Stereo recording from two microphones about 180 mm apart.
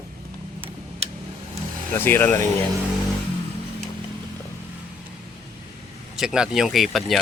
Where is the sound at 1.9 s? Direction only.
10° left (ahead or behind).